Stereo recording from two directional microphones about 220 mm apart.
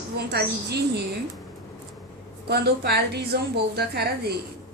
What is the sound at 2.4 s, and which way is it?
A woman's voice, 45° right (ahead or behind).